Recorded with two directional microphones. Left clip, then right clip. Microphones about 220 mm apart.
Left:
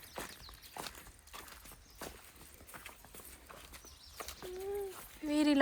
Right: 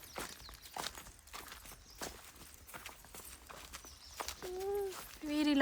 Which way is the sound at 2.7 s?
Centre (ahead or behind).